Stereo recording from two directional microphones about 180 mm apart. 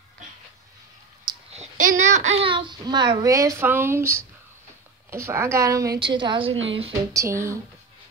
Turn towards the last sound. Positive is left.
turn(degrees=-15)  # may be behind; listen again after turning